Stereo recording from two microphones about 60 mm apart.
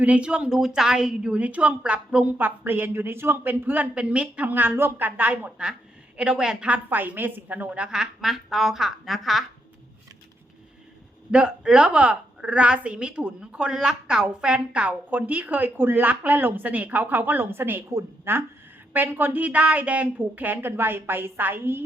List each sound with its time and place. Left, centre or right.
0.0 s a woman's voice: right
2.4 s a woman's voice: right
6.1 s a woman's voice: centre
6.7 s a woman's voice: right
7.9 s speech: centre
11.3 s a woman's voice: centre; by 21.8 s right